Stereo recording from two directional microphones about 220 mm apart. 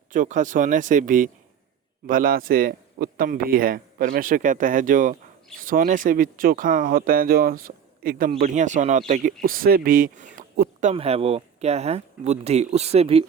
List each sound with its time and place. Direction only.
0.1 s speech: 35° right (ahead or behind)